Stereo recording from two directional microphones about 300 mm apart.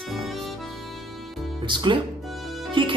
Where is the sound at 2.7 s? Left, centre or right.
Centre.